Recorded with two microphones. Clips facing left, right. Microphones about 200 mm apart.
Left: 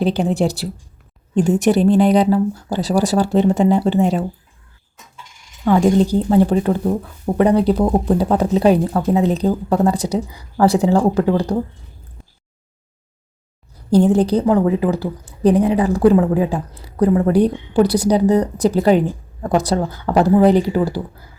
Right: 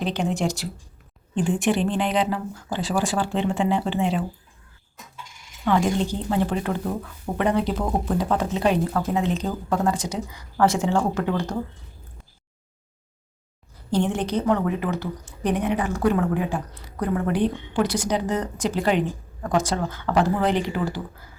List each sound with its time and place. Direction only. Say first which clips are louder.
0.0 s a woman's voice: left 7 dB; 35° left (ahead or behind)
5.6 s a woman's voice: left 8 dB; 40° left (ahead or behind)
13.9 s a woman's voice: left 10 dB; 35° left (ahead or behind)